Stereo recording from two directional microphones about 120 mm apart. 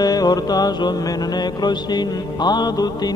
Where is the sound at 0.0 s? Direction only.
35° left (ahead or behind).